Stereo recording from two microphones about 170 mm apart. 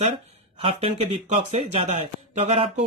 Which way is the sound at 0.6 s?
35° right (ahead or behind).